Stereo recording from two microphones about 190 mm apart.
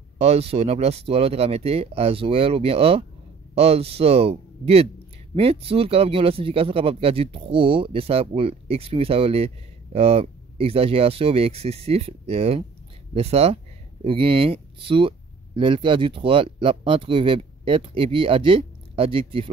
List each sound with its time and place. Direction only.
0.2 s speech: 30° right (ahead or behind)